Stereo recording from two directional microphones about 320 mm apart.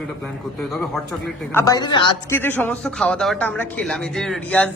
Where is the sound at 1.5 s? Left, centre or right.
Centre.